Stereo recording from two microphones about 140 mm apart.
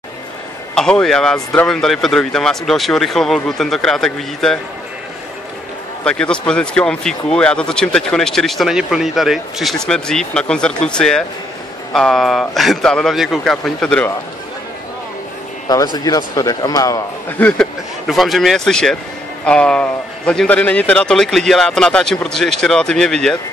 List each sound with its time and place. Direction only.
0.7 s speech: 5° left (ahead or behind)
6.0 s speech: 5° left (ahead or behind)
15.7 s speech: 25° left (ahead or behind)
17.3 s speech: 10° left (ahead or behind)